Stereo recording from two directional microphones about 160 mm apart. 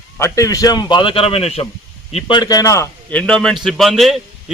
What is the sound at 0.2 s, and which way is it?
A man's voice, 20° left (ahead or behind).